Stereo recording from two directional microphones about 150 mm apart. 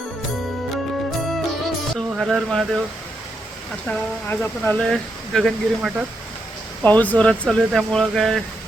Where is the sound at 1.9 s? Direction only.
Centre (ahead or behind).